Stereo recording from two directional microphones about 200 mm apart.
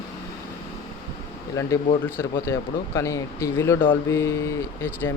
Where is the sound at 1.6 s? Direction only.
15° left (ahead or behind).